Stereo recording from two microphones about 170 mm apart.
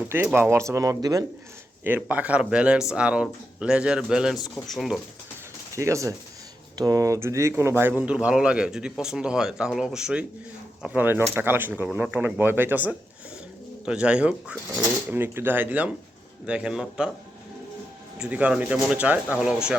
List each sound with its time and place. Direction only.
0.1 s speech: 15° right (ahead or behind)
5.7 s speech: 15° right (ahead or behind)
18.2 s speech: 5° right (ahead or behind)